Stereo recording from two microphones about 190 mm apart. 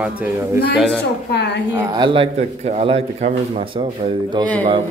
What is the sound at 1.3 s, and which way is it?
Speech, 60° left (ahead or behind).